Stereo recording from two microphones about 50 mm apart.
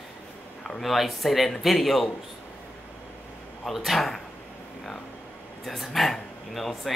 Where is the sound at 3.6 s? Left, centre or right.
Centre.